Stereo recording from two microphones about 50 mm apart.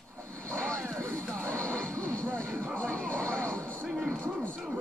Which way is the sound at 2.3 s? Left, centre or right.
Left.